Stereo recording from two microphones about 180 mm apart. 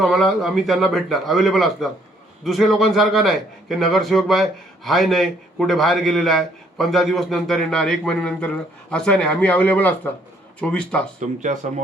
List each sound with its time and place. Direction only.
0.0 s a man's voice: centre (ahead or behind)
11.2 s speech: 45° right (ahead or behind)